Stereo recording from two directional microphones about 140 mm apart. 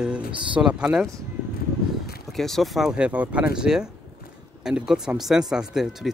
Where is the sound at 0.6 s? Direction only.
5° right (ahead or behind).